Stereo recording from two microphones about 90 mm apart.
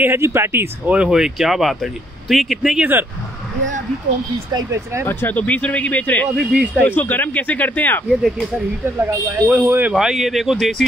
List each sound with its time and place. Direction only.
0.0 s speech: 25° right (ahead or behind)
0.9 s speech: 10° right (ahead or behind)
4.6 s speech: 35° right (ahead or behind)
5.0 s speech: 25° left (ahead or behind)
6.3 s speech: 15° right (ahead or behind)
7.0 s speech: 20° left (ahead or behind)
9.3 s speech: 25° right (ahead or behind)
9.9 s speech: 5° right (ahead or behind)